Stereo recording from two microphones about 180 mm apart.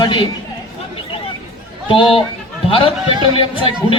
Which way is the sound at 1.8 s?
30° left (ahead or behind).